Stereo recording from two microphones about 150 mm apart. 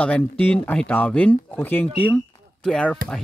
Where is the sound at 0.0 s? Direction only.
10° left (ahead or behind).